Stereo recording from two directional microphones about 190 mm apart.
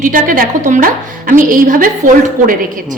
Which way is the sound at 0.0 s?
45° right (ahead or behind).